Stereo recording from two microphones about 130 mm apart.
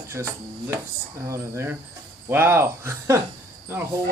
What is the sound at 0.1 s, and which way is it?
Speech, 20° right (ahead or behind).